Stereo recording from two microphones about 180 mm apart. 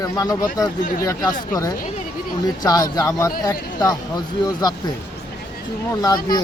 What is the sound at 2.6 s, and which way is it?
Speech, 20° left (ahead or behind).